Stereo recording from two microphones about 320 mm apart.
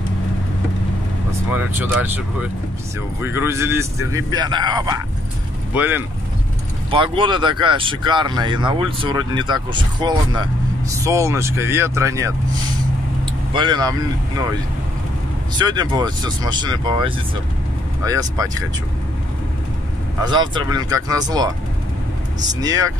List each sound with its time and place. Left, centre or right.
1.5 s speech: centre
13.5 s speech: centre
15.5 s speech: centre
20.2 s speech: centre
22.5 s speech: centre